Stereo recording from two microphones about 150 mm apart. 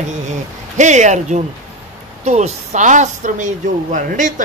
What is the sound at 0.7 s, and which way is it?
A woman's voice, 50° right (ahead or behind).